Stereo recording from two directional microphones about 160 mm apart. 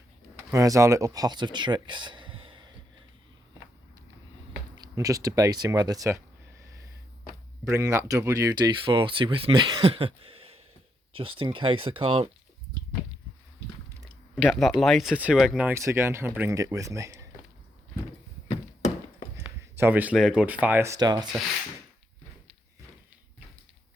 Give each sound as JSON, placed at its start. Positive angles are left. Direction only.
{"t": 0.5, "sound": "speech", "side_deg": -20}
{"t": 4.7, "sound": "speech", "side_deg": -25}
{"t": 7.6, "sound": "speech", "side_deg": -20}
{"t": 14.0, "sound": "a sound", "side_deg": 0}
{"t": 14.8, "sound": "speech", "side_deg": 0}
{"t": 19.4, "sound": "speech", "side_deg": -15}